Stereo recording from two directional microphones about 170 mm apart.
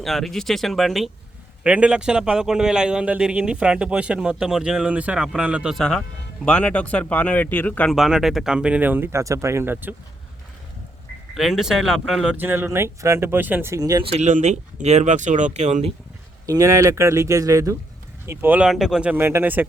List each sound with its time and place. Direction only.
0.0 s a man's voice: centre (ahead or behind)
7.9 s speech: centre (ahead or behind)
11.3 s speech: centre (ahead or behind); by 14.0 s 20° right (ahead or behind)
14.0 s speech: 40° right (ahead or behind)
16.5 s speech: 20° right (ahead or behind)